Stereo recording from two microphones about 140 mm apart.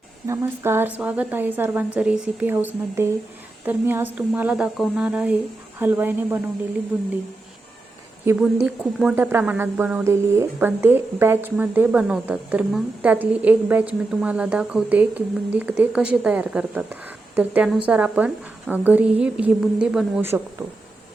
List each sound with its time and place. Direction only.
0.3 s a woman's voice: 15° right (ahead or behind)
8.4 s speech: 5° right (ahead or behind)
9.1 s a woman's voice: 15° right (ahead or behind)
20.2 s a woman's voice: 15° right (ahead or behind)